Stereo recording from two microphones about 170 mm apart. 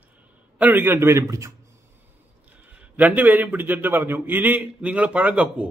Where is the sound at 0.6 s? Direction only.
10° right (ahead or behind).